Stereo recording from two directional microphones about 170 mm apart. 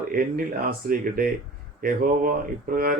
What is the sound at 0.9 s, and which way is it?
Speech, 55° right (ahead or behind).